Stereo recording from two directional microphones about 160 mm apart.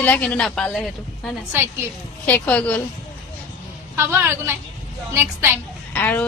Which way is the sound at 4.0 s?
15° right (ahead or behind).